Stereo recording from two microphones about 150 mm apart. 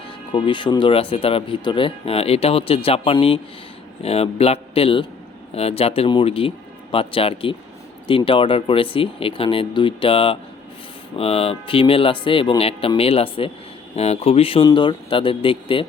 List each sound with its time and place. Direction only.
0.3 s speech: 30° left (ahead or behind)